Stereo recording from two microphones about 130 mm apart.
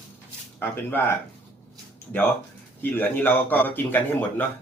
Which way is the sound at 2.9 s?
15° left (ahead or behind).